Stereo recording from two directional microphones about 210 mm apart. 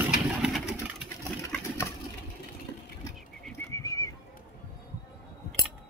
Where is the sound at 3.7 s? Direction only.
15° left (ahead or behind).